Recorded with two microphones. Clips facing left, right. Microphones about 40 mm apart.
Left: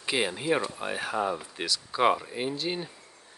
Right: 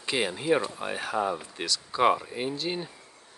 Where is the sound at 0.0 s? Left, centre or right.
Centre.